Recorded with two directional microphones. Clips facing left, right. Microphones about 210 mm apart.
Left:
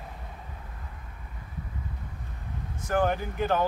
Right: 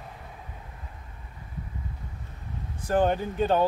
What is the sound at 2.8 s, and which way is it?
Speech, 30° right (ahead or behind).